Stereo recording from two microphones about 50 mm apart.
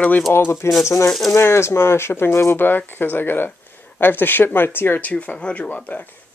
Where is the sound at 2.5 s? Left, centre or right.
Left.